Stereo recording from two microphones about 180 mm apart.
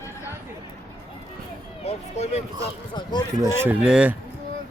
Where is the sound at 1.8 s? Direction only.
35° left (ahead or behind).